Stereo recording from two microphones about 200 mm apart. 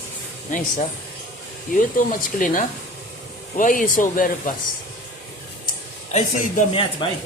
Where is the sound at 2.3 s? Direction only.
40° left (ahead or behind).